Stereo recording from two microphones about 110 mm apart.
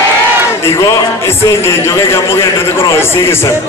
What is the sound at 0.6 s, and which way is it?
A man's voice, 30° left (ahead or behind).